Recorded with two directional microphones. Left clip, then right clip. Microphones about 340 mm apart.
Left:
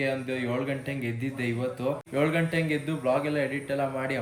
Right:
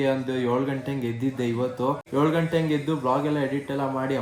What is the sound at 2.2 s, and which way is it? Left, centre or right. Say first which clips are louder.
Speech: right 3 dB; centre.